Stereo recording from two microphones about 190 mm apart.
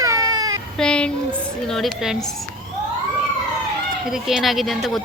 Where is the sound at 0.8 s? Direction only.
5° left (ahead or behind).